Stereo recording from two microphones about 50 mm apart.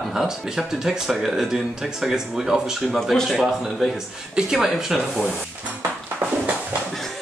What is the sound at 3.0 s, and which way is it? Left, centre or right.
Speech, centre.